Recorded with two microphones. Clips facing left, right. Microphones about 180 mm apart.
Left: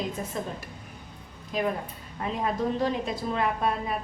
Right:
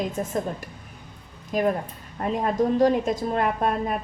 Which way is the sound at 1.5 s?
45° right (ahead or behind).